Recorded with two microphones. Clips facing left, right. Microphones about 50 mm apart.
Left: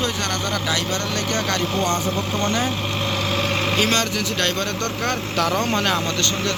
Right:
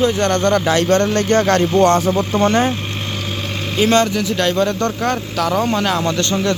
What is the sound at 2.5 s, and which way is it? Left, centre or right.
Speech, right.